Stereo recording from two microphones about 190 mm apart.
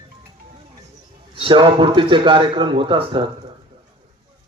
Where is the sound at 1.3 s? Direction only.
25° right (ahead or behind).